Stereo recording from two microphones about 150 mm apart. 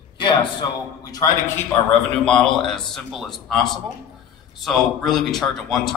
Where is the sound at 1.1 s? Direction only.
25° left (ahead or behind).